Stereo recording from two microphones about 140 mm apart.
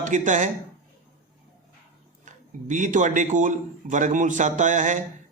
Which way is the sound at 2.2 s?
65° right (ahead or behind).